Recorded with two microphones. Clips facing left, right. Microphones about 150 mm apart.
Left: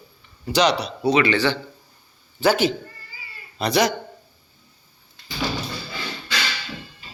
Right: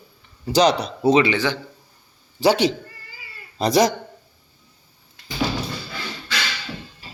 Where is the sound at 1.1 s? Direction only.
20° right (ahead or behind).